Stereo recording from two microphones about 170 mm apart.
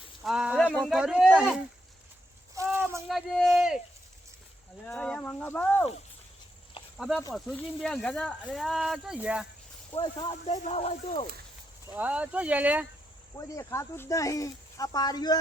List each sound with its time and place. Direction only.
0.2 s speech: 5° right (ahead or behind)
0.6 s speech: 5° left (ahead or behind)
2.7 s a sound: 15° right (ahead or behind)
3.1 s speech: centre (ahead or behind)
4.9 s speech: 5° left (ahead or behind)
6.9 s speech: centre (ahead or behind)
9.9 s speech: 30° left (ahead or behind)
11.9 s speech: 10° right (ahead or behind)
13.3 s speech: 20° left (ahead or behind)